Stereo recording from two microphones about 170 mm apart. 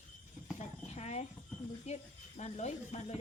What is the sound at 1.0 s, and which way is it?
Speech, 40° left (ahead or behind).